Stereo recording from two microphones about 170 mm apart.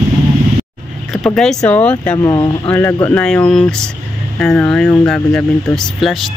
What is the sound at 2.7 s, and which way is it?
Speech, 10° left (ahead or behind).